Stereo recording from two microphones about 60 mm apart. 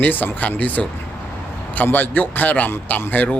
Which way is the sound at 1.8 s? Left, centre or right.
Left.